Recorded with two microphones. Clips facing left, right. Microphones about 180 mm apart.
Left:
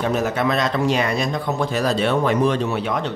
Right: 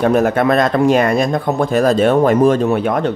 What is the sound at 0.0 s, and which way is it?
Speech, 55° right (ahead or behind).